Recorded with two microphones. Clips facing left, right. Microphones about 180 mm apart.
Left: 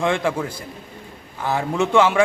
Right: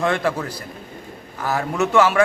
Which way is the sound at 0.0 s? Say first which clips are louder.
Even; 10° left (ahead or behind).